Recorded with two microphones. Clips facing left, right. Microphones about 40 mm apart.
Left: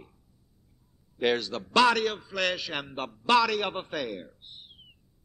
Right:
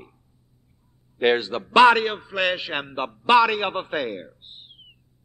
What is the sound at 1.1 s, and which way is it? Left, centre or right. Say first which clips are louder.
A man's voice: right 6 dB; right.